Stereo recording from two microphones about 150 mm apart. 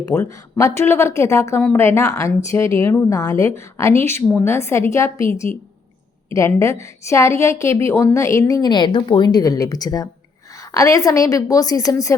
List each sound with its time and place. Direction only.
0.3 s a woman's voice: 20° left (ahead or behind)